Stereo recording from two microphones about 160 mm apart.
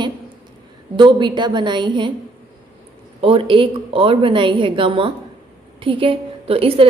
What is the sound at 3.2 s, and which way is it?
A woman's voice, 35° right (ahead or behind).